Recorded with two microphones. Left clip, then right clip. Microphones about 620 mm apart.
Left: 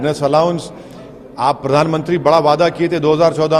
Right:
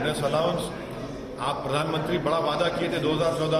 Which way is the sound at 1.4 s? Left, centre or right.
Left.